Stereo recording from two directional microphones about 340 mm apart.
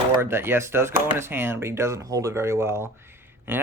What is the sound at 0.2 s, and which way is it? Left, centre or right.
Speech, centre.